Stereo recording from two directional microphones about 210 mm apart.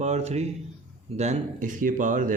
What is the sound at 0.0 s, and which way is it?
Speech, 30° right (ahead or behind).